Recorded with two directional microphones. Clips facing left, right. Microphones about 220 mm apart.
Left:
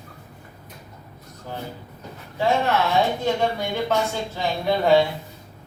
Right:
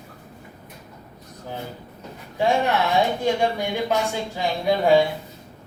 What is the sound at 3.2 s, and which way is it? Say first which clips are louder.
Speech: right 1 dB; 15° right (ahead or behind).